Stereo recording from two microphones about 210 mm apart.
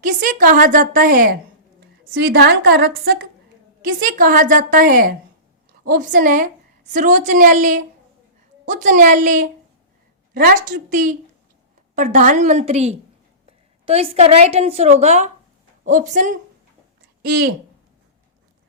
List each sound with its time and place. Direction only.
0.0 s a woman's voice: 40° right (ahead or behind)
2.3 s a woman's voice: 45° right (ahead or behind)